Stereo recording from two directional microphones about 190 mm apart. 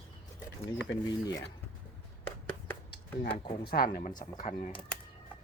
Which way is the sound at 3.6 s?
50° left (ahead or behind).